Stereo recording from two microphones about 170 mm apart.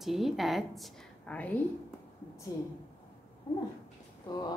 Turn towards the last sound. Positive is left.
turn(degrees=25)  # may be behind; listen again after turning